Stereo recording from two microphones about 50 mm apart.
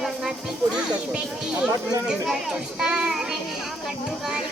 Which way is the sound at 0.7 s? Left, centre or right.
Centre.